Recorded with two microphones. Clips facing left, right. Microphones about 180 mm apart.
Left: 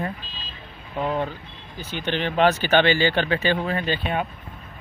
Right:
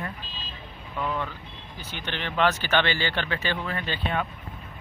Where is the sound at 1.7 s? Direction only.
15° left (ahead or behind).